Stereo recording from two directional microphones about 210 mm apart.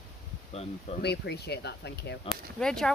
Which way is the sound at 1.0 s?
50° left (ahead or behind).